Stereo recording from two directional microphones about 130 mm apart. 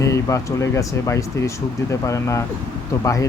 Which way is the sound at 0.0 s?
25° left (ahead or behind).